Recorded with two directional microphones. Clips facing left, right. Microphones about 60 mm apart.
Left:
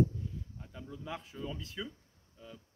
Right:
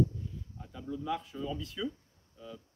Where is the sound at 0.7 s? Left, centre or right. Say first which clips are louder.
Right 7 dB; left.